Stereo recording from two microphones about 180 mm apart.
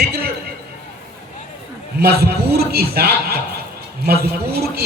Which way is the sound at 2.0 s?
60° right (ahead or behind).